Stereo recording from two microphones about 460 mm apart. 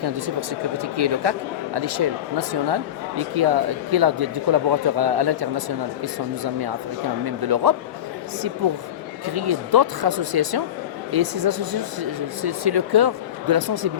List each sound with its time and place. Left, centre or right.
0.0 s speech: right
9.2 s speech: right